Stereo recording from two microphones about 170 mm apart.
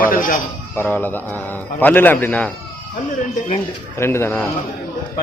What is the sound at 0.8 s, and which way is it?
A man's voice, 10° left (ahead or behind).